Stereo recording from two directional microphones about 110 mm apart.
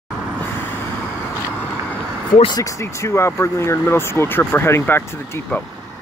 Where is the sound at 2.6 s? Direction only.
25° left (ahead or behind).